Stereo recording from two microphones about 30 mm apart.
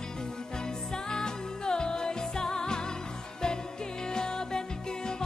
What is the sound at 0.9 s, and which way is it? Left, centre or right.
Music, left.